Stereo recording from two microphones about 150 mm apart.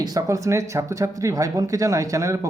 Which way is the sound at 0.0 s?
25° right (ahead or behind).